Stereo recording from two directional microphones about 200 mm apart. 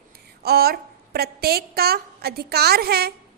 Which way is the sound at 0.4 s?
50° right (ahead or behind).